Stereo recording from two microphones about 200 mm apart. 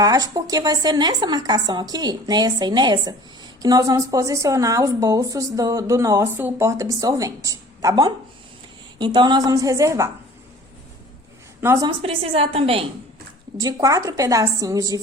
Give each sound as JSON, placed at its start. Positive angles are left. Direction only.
{"t": 0.0, "sound": "a woman's voice", "side_deg": -20}
{"t": 11.6, "sound": "a woman's voice", "side_deg": -15}
{"t": 13.6, "sound": "speech", "side_deg": -20}